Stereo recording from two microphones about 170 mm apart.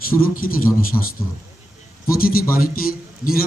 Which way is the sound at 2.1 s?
60° left (ahead or behind).